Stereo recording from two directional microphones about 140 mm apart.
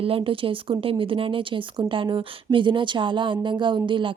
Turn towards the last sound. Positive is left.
turn(degrees=-35)  # may be behind; listen again after turning